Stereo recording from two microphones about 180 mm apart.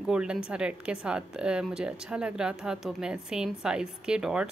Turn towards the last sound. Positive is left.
turn(degrees=-5)  # may be behind; listen again after turning